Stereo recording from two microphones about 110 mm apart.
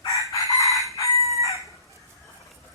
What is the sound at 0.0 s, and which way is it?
Chicken, 30° left (ahead or behind).